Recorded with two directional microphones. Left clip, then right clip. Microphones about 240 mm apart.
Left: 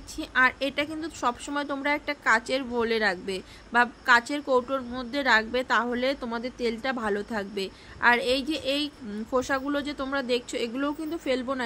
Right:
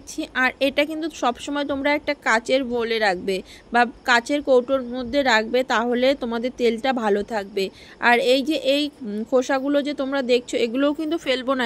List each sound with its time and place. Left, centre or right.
0.2 s a woman's voice: centre